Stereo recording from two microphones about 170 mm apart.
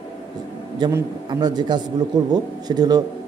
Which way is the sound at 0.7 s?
25° right (ahead or behind).